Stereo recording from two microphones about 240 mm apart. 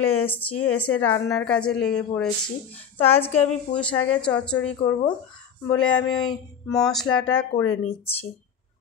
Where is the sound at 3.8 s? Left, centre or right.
Centre.